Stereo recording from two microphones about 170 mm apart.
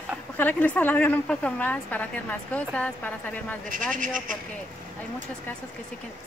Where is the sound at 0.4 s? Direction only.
10° left (ahead or behind).